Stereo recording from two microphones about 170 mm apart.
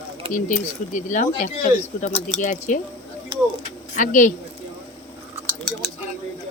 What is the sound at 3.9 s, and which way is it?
Speech, 50° left (ahead or behind).